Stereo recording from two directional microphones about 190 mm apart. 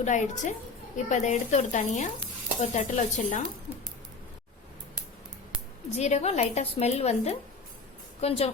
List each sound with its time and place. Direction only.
0.0 s a woman's voice: 40° left (ahead or behind)
5.9 s a woman's voice: 35° left (ahead or behind)